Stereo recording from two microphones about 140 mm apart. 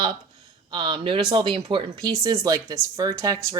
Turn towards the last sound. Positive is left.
turn(degrees=-25)  # may be behind; listen again after turning